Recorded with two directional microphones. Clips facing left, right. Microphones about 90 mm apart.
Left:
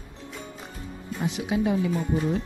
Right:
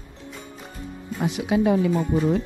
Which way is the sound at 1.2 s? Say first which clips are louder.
Right 4 dB; 65° right (ahead or behind).